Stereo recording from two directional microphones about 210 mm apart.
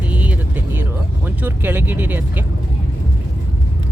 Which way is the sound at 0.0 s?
5° right (ahead or behind).